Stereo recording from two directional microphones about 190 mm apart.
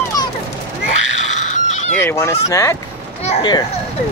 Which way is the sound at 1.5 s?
40° left (ahead or behind).